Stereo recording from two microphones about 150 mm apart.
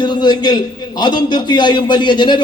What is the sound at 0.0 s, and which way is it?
A man's voice, 30° left (ahead or behind).